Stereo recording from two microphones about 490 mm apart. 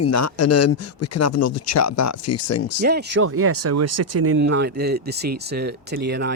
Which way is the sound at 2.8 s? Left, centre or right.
Centre.